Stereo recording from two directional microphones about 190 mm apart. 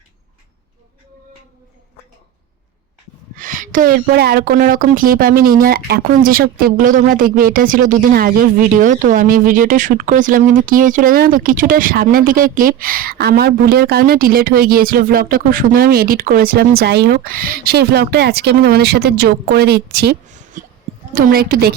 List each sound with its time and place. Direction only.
3.3 s speech: 45° right (ahead or behind)
20.2 s a sound: 40° right (ahead or behind)
21.2 s speech: 50° right (ahead or behind)